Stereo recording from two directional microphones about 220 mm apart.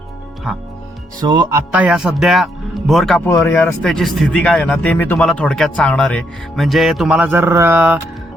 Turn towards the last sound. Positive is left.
turn(degrees=-5)  # may be behind; listen again after turning